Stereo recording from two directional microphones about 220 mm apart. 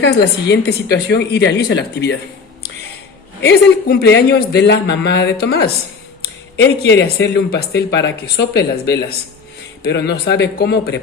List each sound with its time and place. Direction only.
0.0 s speech: 50° left (ahead or behind)
3.4 s speech: 50° left (ahead or behind)